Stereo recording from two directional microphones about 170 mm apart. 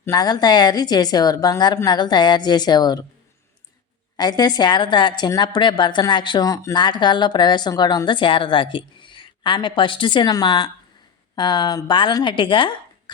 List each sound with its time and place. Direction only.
0.0 s a woman's voice: 20° left (ahead or behind)
4.2 s a woman's voice: 25° left (ahead or behind)